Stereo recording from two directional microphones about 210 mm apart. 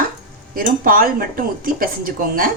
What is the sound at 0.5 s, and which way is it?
Speech, 45° right (ahead or behind).